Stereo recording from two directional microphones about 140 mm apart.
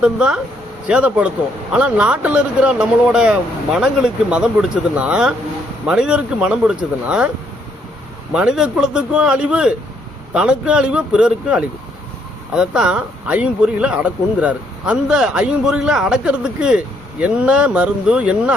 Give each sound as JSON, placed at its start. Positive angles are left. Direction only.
{"t": 0.0, "sound": "speech", "side_deg": -5}
{"t": 8.3, "sound": "speech", "side_deg": -5}